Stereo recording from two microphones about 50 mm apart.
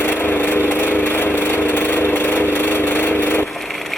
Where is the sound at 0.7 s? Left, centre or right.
Left.